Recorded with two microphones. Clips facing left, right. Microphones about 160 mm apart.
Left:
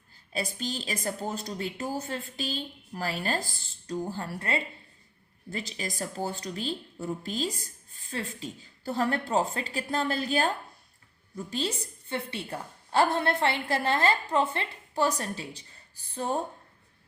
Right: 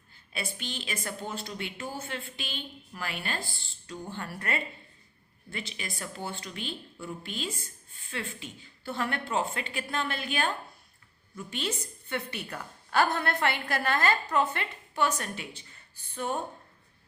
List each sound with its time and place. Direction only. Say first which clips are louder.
0.3 s a woman's voice: left 5 dB; 40° left (ahead or behind)
5.5 s a woman's voice: left 4 dB; 40° left (ahead or behind)